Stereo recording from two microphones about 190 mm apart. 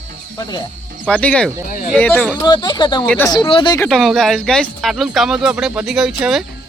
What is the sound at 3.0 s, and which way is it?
Speech, 10° left (ahead or behind).